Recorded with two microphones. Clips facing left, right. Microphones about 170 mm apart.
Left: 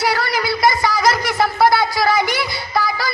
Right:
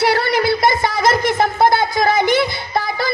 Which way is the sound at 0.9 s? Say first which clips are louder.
Even; 55° right (ahead or behind).